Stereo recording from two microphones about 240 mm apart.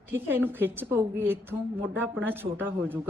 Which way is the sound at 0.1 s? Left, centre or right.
Centre.